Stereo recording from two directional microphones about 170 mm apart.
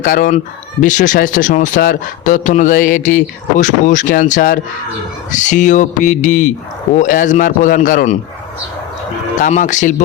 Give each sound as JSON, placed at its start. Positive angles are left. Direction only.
{"t": 0.0, "sound": "a man's voice", "side_deg": 50}
{"t": 9.4, "sound": "a man's voice", "side_deg": 45}